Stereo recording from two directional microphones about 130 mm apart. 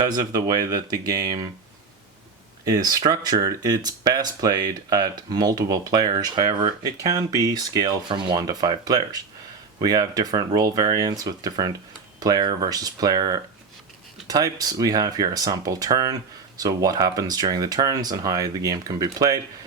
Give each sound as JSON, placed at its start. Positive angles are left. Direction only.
{"t": 0.0, "sound": "speech", "side_deg": -30}
{"t": 2.6, "sound": "speech", "side_deg": -30}